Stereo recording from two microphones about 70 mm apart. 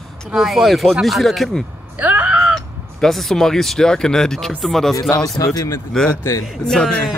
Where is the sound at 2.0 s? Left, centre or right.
Right.